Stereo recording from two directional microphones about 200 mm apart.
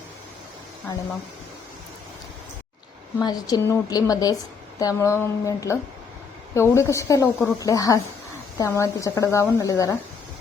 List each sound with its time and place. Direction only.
3.2 s a woman's voice: 20° left (ahead or behind)